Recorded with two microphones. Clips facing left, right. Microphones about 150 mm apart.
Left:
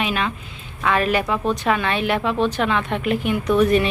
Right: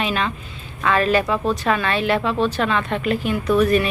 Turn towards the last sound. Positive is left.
turn(degrees=20)  # may be behind; listen again after turning